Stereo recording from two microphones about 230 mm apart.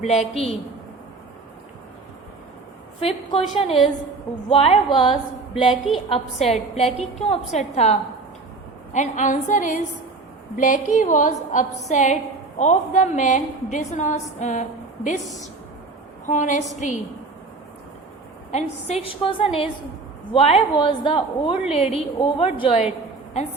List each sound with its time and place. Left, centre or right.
0.0 s a woman's voice: left
3.0 s a woman's voice: left
16.2 s a woman's voice: left
18.5 s a woman's voice: left